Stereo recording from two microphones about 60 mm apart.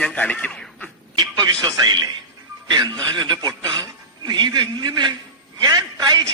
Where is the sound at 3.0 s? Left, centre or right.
Right.